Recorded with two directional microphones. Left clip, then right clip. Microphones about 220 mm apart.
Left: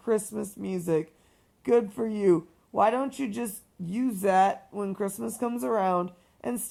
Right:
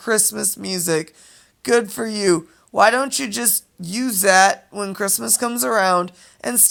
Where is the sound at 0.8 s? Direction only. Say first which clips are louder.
Right 5 dB; 20° right (ahead or behind).